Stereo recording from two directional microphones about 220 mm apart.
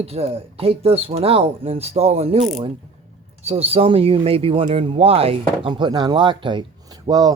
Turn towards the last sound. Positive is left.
turn(degrees=-15)  # may be behind; listen again after turning